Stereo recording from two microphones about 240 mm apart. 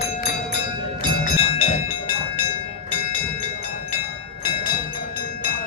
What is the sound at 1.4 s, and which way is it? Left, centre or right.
Music, left.